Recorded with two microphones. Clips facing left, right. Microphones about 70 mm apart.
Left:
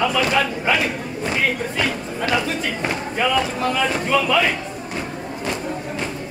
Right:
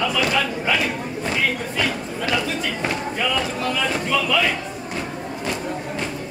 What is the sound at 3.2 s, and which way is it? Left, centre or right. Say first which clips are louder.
Speech: left 5 dB; left.